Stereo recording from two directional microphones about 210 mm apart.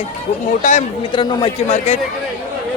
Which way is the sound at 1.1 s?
25° left (ahead or behind).